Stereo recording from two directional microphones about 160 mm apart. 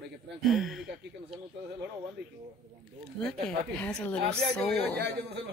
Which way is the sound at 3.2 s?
5° left (ahead or behind).